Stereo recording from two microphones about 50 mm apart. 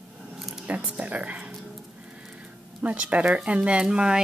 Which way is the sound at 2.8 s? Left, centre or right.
Right.